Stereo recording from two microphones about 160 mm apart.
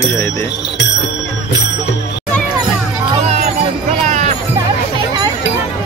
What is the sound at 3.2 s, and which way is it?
Music, 45° right (ahead or behind).